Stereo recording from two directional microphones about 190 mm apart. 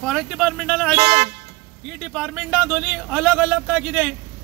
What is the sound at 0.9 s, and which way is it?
Speech, 30° right (ahead or behind).